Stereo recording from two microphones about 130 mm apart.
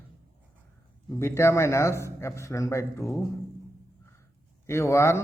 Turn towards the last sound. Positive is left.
turn(degrees=20)  # may be behind; listen again after turning